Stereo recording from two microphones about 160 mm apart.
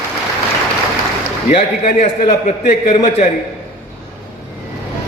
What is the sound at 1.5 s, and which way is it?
A man's voice, 45° left (ahead or behind).